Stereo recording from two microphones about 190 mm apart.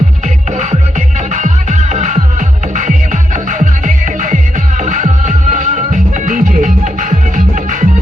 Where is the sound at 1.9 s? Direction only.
40° right (ahead or behind).